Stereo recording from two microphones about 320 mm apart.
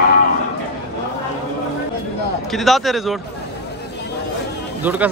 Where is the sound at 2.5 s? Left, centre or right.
Centre.